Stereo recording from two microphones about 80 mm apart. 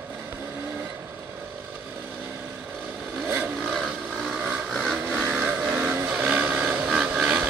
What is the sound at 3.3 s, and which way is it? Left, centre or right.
Vehicle, right.